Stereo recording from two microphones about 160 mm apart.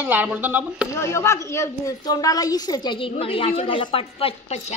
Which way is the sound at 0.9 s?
15° left (ahead or behind).